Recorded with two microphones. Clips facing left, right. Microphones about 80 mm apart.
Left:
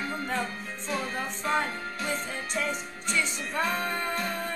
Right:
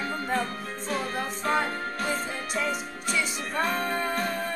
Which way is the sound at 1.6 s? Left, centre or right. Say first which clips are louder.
Right 3 dB; right.